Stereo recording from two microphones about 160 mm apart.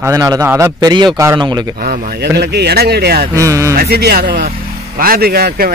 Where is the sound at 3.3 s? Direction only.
20° right (ahead or behind).